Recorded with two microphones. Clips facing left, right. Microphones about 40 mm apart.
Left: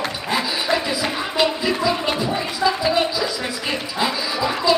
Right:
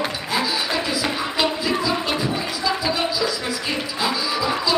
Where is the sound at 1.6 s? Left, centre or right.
Centre.